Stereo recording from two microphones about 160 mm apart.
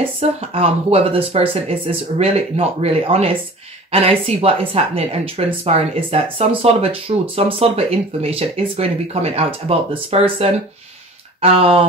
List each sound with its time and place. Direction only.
0.4 s speech: 40° right (ahead or behind)